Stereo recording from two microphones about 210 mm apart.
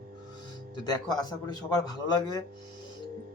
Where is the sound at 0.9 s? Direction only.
20° left (ahead or behind).